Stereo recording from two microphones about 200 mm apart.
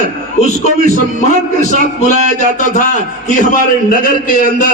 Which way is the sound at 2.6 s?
40° left (ahead or behind).